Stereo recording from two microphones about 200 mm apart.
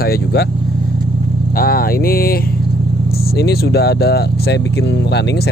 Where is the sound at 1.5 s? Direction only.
50° left (ahead or behind).